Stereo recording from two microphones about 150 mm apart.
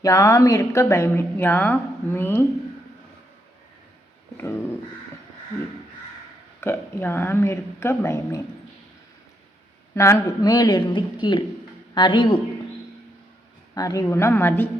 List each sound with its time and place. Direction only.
0.0 s a woman's voice: 20° left (ahead or behind)
4.4 s a sound: 15° left (ahead or behind)
6.6 s a woman's voice: 15° left (ahead or behind)
9.9 s speech: 20° left (ahead or behind)
13.7 s a woman's voice: 25° left (ahead or behind)